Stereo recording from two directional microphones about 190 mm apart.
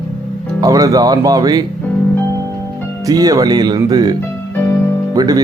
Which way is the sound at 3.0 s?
20° right (ahead or behind).